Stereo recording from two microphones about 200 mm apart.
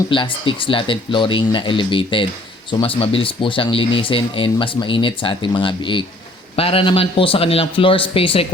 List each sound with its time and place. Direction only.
0.1 s speech: 25° left (ahead or behind)